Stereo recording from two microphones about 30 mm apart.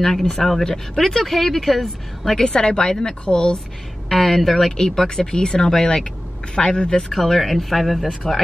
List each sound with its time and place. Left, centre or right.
0.0 s speech: centre
2.3 s a woman's voice: left
4.1 s speech: centre
4.7 s speech: centre
7.2 s speech: centre